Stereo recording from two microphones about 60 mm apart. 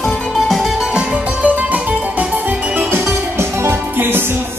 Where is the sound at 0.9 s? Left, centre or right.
Right.